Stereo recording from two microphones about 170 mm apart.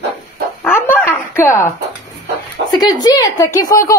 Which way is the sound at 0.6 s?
10° left (ahead or behind).